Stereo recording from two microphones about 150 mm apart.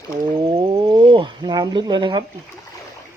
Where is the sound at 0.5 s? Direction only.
40° right (ahead or behind).